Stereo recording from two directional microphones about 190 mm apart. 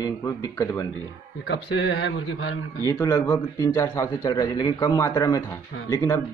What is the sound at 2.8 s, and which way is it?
A man's voice, 15° left (ahead or behind).